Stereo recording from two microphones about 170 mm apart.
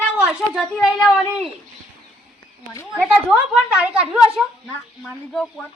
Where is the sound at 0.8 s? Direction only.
5° right (ahead or behind).